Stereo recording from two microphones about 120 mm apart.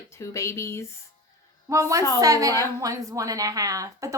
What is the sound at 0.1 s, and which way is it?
Speech, 25° left (ahead or behind).